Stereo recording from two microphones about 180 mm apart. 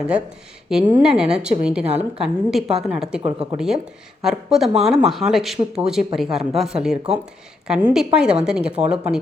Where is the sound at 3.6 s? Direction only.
5° right (ahead or behind).